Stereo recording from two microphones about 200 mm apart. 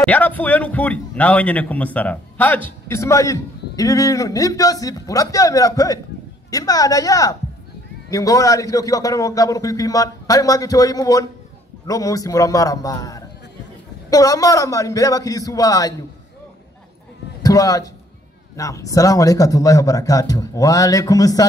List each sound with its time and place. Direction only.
0.0 s a man's voice: 5° left (ahead or behind)
17.4 s a man's voice: 15° left (ahead or behind)